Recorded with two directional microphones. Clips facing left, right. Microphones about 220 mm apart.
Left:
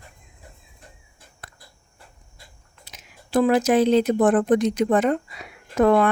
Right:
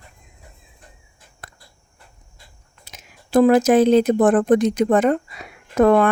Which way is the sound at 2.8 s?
45° right (ahead or behind).